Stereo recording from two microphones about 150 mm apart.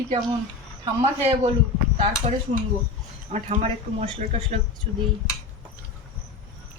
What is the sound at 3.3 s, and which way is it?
Speech, 45° right (ahead or behind).